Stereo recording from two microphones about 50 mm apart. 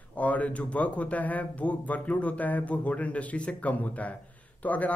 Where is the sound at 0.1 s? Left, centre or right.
Left.